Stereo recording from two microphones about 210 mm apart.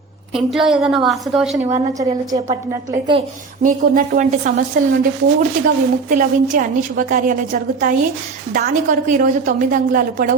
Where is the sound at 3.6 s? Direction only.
45° right (ahead or behind).